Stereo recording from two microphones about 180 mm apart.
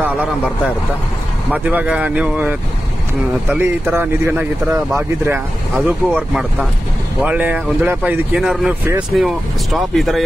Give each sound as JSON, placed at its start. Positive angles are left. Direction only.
{"t": 1.5, "sound": "speech", "side_deg": -10}
{"t": 5.8, "sound": "speech", "side_deg": -5}